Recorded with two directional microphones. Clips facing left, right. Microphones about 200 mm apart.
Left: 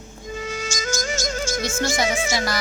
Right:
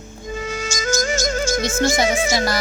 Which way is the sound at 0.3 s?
50° right (ahead or behind).